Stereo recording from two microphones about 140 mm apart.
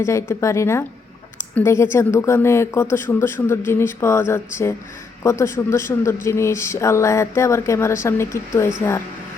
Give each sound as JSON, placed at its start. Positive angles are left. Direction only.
{"t": 0.0, "sound": "speech", "side_deg": 20}